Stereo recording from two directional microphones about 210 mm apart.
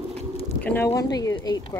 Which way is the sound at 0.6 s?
10° left (ahead or behind).